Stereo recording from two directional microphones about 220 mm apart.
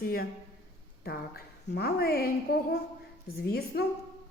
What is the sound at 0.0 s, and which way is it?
A woman's voice, 40° left (ahead or behind).